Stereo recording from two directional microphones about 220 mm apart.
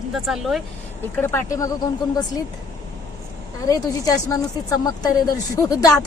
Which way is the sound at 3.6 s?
15° left (ahead or behind).